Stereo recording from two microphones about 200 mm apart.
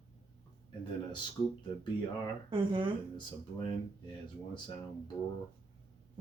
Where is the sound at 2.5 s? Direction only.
25° right (ahead or behind).